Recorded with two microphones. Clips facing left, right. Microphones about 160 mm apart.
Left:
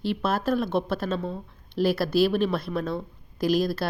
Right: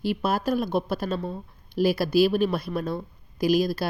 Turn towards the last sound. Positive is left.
turn(degrees=-5)  # may be behind; listen again after turning